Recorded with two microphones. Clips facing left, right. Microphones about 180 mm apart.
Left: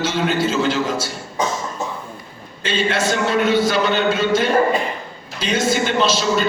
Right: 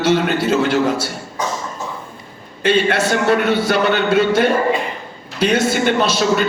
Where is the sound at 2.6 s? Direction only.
60° right (ahead or behind).